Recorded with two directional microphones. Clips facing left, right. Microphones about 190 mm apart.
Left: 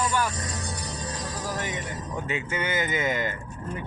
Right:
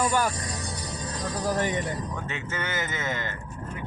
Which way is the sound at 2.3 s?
10° left (ahead or behind).